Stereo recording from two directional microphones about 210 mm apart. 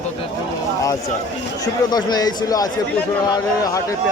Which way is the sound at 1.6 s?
20° left (ahead or behind).